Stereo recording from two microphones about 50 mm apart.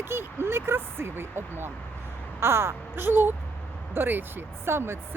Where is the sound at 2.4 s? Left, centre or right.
Right.